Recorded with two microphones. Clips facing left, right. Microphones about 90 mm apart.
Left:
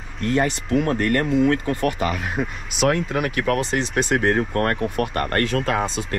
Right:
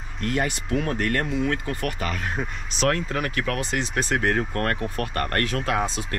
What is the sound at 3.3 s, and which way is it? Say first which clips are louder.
Speech: left 5 dB; 40° left (ahead or behind).